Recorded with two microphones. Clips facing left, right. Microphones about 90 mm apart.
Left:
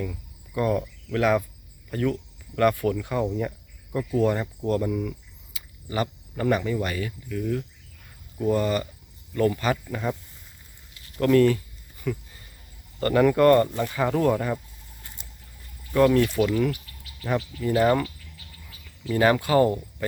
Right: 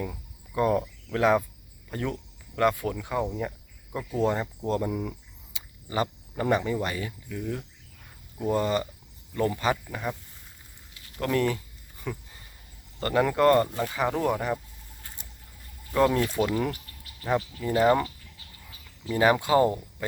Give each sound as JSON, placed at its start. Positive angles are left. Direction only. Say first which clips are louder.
{"t": 0.0, "sound": "cricket", "louder": "left 2 dB", "side_deg": -25}
{"t": 1.9, "sound": "speech", "louder": "left 6 dB", "side_deg": -25}
{"t": 9.9, "sound": "speech", "louder": "left 4 dB", "side_deg": -10}
{"t": 11.2, "sound": "cricket", "louder": "left 7 dB", "side_deg": -20}
{"t": 13.0, "sound": "speech", "louder": "left 4 dB", "side_deg": -20}
{"t": 15.9, "sound": "speech", "louder": "left 4 dB", "side_deg": -20}
{"t": 17.2, "sound": "speech", "louder": "left 1 dB", "side_deg": -20}
{"t": 19.1, "sound": "speech", "louder": "left 1 dB", "side_deg": -20}